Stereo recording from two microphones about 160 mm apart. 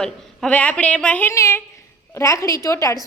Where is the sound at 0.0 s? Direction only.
5° left (ahead or behind).